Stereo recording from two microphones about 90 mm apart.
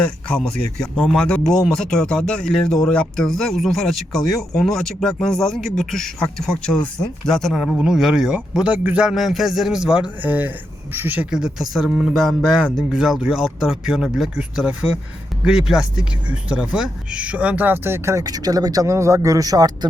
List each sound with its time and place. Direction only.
0.0 s speech: 10° left (ahead or behind); by 11.3 s 20° right (ahead or behind)
11.3 s speech: 5° right (ahead or behind); by 19.9 s 45° right (ahead or behind)